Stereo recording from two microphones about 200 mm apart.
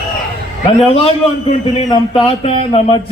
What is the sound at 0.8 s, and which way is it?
A man's voice, 30° left (ahead or behind).